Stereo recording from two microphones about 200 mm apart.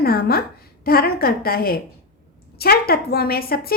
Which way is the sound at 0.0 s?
50° left (ahead or behind).